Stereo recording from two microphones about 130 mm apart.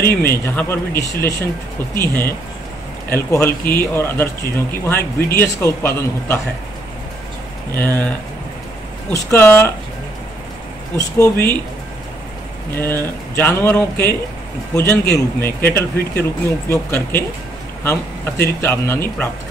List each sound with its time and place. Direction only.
0.0 s a man's voice: 15° left (ahead or behind)
7.7 s a man's voice: 15° left (ahead or behind)
9.1 s a man's voice: 20° left (ahead or behind)
11.0 s speech: 20° left (ahead or behind)
13.0 s a man's voice: 15° left (ahead or behind)